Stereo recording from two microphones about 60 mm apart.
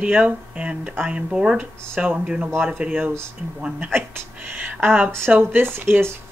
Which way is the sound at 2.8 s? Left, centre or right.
Right.